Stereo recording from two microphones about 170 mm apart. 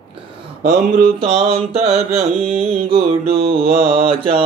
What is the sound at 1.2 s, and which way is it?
Mantra, 35° right (ahead or behind).